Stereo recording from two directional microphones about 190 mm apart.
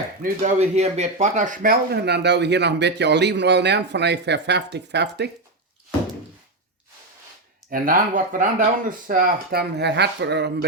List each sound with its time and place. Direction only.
0.2 s a man's voice: 40° right (ahead or behind); by 5.3 s 60° right (ahead or behind)
7.7 s speech: 45° right (ahead or behind); by 10.7 s 60° right (ahead or behind)